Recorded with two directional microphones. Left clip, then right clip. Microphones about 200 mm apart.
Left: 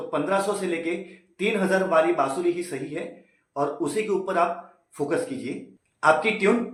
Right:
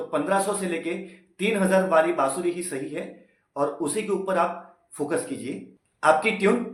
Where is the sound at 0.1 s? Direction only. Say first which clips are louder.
Even; 5° right (ahead or behind).